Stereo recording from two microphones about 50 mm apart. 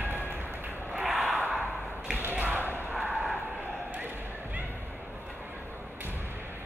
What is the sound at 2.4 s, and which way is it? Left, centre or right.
Music, right.